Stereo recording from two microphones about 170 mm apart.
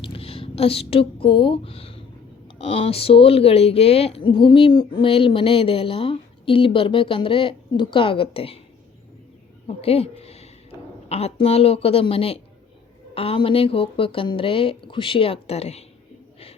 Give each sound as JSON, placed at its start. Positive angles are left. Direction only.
{"t": 0.0, "sound": "speech", "side_deg": 35}
{"t": 9.6, "sound": "speech", "side_deg": 35}